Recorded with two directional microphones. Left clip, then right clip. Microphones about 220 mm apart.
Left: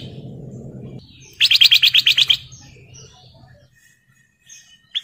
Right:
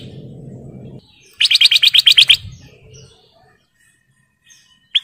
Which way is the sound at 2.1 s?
30° right (ahead or behind).